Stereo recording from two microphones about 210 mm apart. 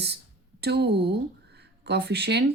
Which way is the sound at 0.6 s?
50° right (ahead or behind).